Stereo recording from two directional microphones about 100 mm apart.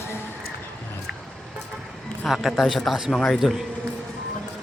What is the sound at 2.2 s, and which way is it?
A man's voice, centre (ahead or behind).